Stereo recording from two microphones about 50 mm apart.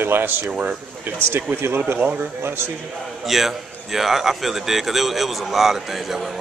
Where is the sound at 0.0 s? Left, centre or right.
Right.